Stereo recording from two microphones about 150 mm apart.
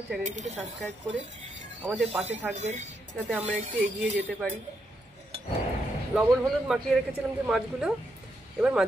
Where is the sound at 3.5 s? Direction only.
60° right (ahead or behind).